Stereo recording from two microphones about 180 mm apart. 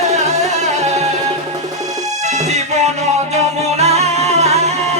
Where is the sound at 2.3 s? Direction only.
40° right (ahead or behind).